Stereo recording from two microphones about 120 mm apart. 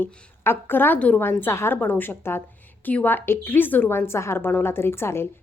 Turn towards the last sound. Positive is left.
turn(degrees=20)  # may be behind; listen again after turning